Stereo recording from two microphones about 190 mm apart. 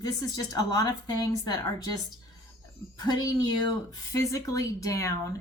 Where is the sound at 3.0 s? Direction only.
20° left (ahead or behind).